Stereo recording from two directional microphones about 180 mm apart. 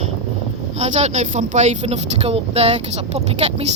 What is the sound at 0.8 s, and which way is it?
Speech, 40° right (ahead or behind).